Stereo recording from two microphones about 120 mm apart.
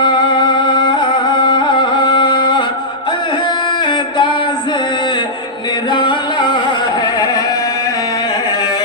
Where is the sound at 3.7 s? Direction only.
40° left (ahead or behind).